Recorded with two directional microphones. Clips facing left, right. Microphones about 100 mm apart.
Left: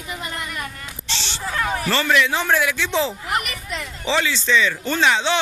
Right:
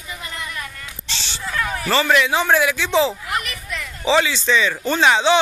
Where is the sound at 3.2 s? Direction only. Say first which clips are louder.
Left 1 dB; 30° left (ahead or behind).